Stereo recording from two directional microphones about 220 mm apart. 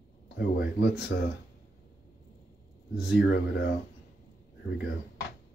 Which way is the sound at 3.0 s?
45° left (ahead or behind).